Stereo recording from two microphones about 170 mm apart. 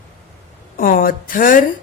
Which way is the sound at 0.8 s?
55° left (ahead or behind).